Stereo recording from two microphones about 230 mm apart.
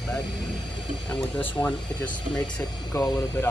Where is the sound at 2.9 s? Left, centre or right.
Centre.